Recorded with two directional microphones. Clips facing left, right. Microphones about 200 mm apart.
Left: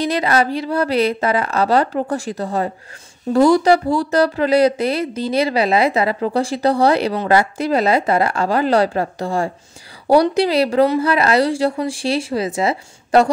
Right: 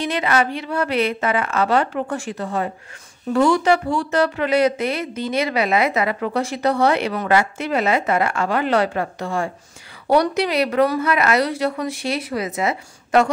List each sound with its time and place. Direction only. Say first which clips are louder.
0.0 s speech: left 3 dB; 35° left (ahead or behind)